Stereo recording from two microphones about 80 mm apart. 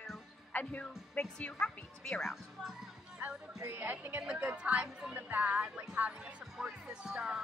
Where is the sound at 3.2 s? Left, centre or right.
Right.